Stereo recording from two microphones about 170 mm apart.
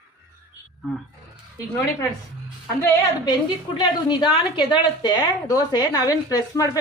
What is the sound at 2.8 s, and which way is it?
Speech, 15° left (ahead or behind).